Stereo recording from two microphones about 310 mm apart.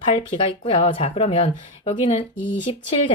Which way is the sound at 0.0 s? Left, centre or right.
Centre.